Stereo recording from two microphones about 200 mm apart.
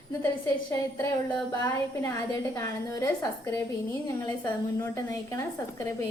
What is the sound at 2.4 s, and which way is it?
A woman's voice, 15° left (ahead or behind).